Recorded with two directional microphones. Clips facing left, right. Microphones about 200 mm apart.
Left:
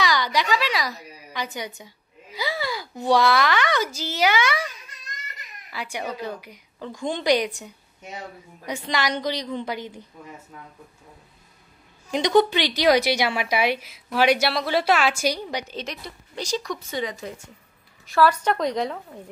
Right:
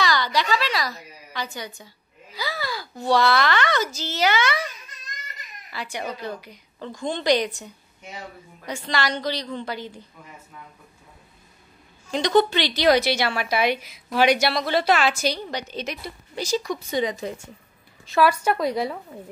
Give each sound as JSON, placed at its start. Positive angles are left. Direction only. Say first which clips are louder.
{"t": 0.0, "sound": "a sound", "louder": "even", "side_deg": 15}
{"t": 2.3, "sound": "a child's voice", "louder": "left 2 dB", "side_deg": 20}
{"t": 5.7, "sound": "a woman's voice", "louder": "even", "side_deg": 10}
{"t": 12.1, "sound": "a woman's voice", "louder": "left 1 dB", "side_deg": 15}
{"t": 13.7, "sound": "a woman's voice", "louder": "right 1 dB", "side_deg": 5}
{"t": 15.8, "sound": "a woman's voice", "louder": "right 2 dB", "side_deg": -5}
{"t": 16.9, "sound": "a woman's voice", "louder": "right 6 dB", "side_deg": -20}
{"t": 18.3, "sound": "a woman's voice", "louder": "right 1 dB", "side_deg": -10}